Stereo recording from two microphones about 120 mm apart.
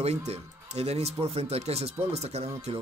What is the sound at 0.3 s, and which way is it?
Speech, 60° right (ahead or behind).